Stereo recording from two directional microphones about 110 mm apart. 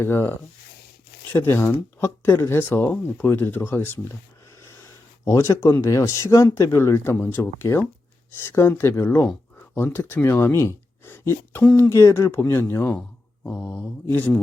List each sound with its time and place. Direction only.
0.0 s speech: 20° left (ahead or behind)
5.2 s speech: 25° left (ahead or behind)
11.6 s speech: 10° left (ahead or behind)
11.9 s speech: 25° left (ahead or behind)